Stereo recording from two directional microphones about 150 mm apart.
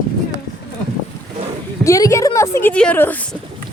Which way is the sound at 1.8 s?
20° left (ahead or behind).